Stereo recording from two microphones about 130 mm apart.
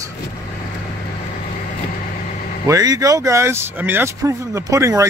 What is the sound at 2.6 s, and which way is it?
Speech, 25° right (ahead or behind).